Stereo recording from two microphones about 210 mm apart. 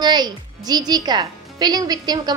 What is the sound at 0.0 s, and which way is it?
A woman's voice, 20° right (ahead or behind).